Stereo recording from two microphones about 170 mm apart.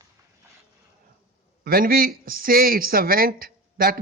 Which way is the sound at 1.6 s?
60° right (ahead or behind).